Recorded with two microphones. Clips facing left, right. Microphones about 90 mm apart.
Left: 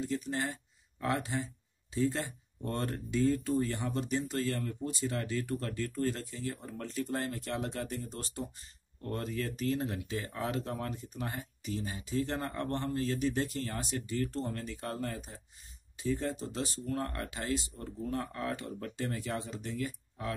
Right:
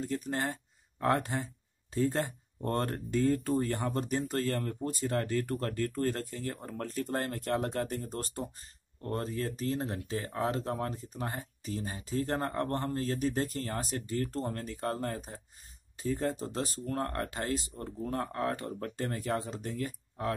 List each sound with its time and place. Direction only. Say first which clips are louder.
0.0 s speech: right 1 dB; 45° right (ahead or behind)